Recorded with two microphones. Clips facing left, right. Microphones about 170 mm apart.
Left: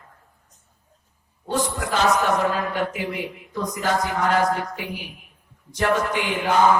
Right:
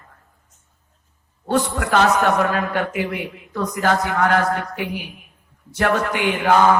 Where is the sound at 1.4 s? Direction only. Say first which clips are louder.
Right 4 dB; 65° right (ahead or behind).